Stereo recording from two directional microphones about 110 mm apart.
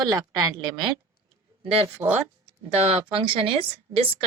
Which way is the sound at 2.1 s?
75° right (ahead or behind).